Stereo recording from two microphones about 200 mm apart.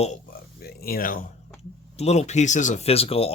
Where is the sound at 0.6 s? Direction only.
50° left (ahead or behind).